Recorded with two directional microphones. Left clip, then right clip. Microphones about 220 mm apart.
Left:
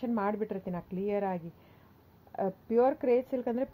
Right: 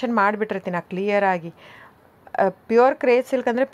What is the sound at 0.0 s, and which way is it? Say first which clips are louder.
Speech: right 12 dB; 15° right (ahead or behind).